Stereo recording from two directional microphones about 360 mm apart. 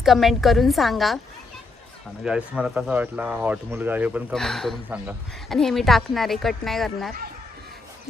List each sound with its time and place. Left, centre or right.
0.0 s speech: centre
2.2 s speech: centre